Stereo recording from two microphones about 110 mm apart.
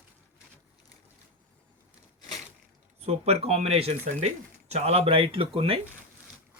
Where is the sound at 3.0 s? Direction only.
70° right (ahead or behind); by 5.8 s 55° right (ahead or behind).